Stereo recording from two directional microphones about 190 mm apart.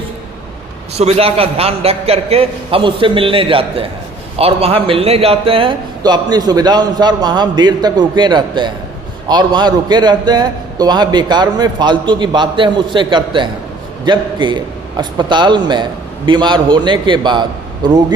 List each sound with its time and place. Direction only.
0.9 s a man's voice: 35° right (ahead or behind)